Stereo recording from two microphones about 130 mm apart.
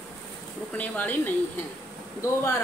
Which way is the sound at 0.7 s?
10° left (ahead or behind).